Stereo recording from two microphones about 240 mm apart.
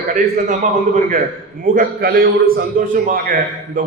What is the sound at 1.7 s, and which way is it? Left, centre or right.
A man's voice, right.